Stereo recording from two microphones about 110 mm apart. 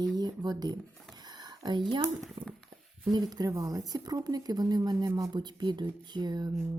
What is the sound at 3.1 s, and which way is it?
Speech, 35° right (ahead or behind).